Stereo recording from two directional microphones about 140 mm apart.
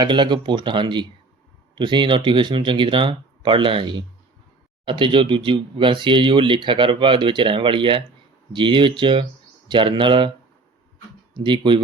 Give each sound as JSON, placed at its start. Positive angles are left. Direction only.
{"t": 0.0, "sound": "speech", "side_deg": -35}
{"t": 11.3, "sound": "speech", "side_deg": -35}